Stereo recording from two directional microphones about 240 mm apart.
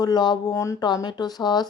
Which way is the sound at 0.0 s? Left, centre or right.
Centre.